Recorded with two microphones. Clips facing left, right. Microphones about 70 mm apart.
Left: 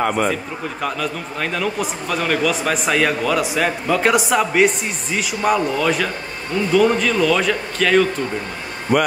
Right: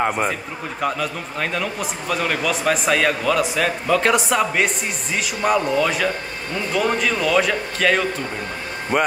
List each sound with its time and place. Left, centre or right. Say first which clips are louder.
0.0 s a man's voice: left 2 dB; centre
0.7 s a man's voice: right 2 dB; centre